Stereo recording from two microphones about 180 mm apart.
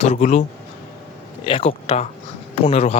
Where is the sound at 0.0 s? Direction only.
35° left (ahead or behind).